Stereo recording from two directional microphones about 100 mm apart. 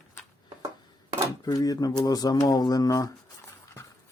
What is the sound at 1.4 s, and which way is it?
Speech, 40° left (ahead or behind).